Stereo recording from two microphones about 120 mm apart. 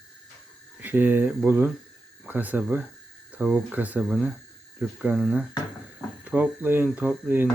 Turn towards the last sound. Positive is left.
turn(degrees=-15)  # may be behind; listen again after turning